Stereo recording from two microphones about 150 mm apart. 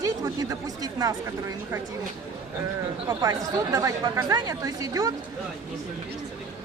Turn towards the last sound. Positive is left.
turn(degrees=-25)  # may be behind; listen again after turning